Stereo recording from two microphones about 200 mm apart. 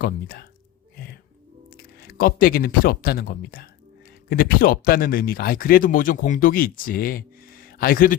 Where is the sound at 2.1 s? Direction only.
50° left (ahead or behind).